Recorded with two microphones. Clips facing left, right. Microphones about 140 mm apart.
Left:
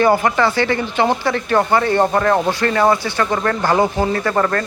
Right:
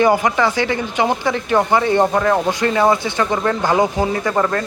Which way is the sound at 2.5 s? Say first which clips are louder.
Even; 15° right (ahead or behind).